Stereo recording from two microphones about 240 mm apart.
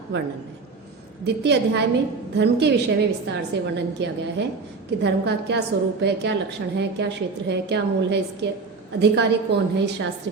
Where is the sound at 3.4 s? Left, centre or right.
Right.